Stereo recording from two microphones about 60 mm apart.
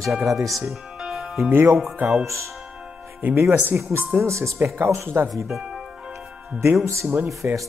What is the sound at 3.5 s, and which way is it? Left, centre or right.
Speech, right.